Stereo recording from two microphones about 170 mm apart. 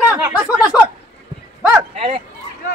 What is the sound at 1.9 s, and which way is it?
Speech, 40° right (ahead or behind).